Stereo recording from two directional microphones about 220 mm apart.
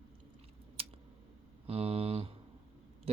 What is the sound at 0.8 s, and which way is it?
Scissors, 25° right (ahead or behind).